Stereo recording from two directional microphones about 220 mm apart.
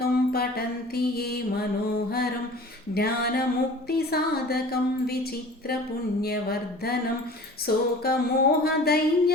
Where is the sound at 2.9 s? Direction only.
45° left (ahead or behind).